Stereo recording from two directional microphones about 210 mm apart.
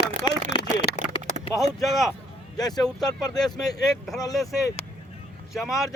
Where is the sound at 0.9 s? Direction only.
50° left (ahead or behind).